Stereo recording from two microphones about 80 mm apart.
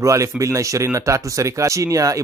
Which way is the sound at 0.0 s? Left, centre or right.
Right.